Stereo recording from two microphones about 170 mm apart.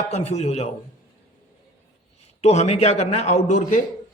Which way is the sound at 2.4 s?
40° left (ahead or behind).